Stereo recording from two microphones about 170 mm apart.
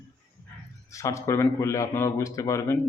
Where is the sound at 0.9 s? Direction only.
20° left (ahead or behind).